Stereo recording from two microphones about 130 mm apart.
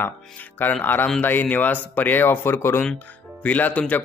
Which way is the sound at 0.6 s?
15° left (ahead or behind).